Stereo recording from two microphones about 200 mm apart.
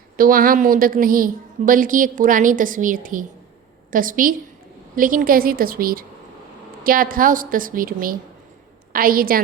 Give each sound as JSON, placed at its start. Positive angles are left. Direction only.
{"t": 0.2, "sound": "a woman's voice", "side_deg": -45}